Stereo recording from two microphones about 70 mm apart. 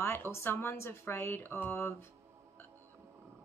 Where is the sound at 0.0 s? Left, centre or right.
Left.